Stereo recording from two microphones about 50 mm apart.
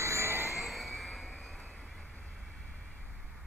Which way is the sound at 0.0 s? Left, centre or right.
Right.